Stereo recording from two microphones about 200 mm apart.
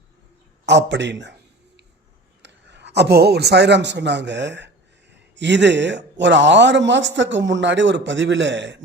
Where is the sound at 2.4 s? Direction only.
60° right (ahead or behind).